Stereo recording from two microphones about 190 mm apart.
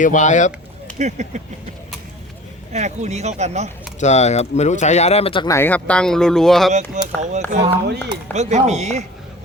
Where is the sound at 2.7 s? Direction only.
35° right (ahead or behind).